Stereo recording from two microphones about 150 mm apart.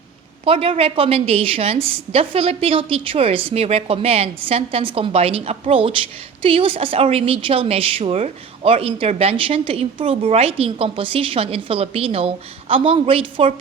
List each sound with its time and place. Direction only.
0.4 s a woman's voice: 40° right (ahead or behind)